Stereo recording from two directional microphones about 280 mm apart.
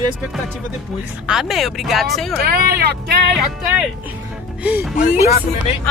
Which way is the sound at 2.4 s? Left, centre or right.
Right.